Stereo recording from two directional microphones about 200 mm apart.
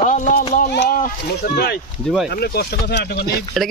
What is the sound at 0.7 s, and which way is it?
Speech, 50° left (ahead or behind).